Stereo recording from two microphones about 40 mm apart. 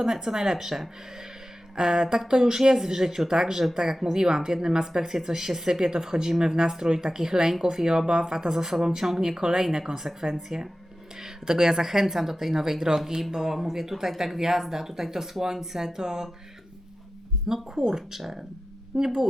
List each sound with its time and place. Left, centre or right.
0.0 s speech: centre
17.5 s speech: centre